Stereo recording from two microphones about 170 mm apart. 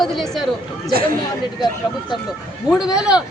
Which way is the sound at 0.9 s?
60° right (ahead or behind).